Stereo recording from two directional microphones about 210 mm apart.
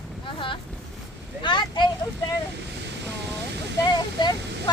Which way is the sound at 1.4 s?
20° left (ahead or behind).